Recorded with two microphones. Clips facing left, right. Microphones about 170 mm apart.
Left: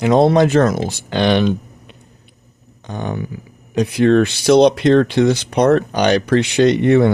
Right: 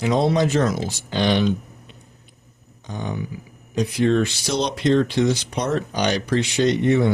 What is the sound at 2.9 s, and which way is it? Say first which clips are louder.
Speech: left 4 dB; 65° left (ahead or behind).